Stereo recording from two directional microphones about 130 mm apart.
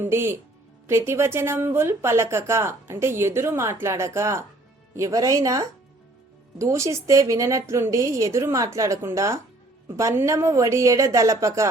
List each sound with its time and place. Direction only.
0.0 s speech: 20° right (ahead or behind)